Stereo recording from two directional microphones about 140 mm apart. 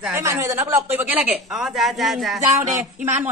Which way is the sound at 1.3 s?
Centre (ahead or behind).